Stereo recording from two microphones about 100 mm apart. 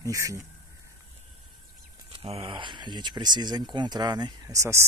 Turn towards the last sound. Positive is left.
turn(degrees=-30)  # may be behind; listen again after turning